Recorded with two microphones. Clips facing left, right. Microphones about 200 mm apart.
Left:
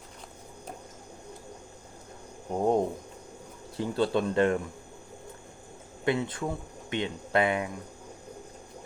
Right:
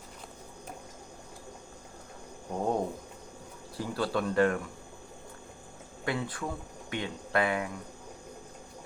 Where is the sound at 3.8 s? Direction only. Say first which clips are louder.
Left 4 dB; 25° left (ahead or behind).